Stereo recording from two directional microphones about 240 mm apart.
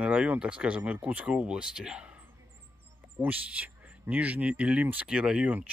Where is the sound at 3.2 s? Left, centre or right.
Centre.